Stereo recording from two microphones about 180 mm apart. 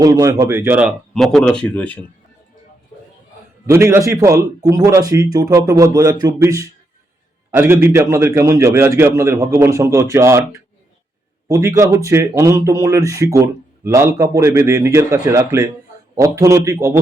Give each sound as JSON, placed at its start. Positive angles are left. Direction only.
{"t": 0.0, "sound": "speech", "side_deg": -15}
{"t": 3.7, "sound": "speech", "side_deg": -15}
{"t": 11.4, "sound": "speech", "side_deg": -15}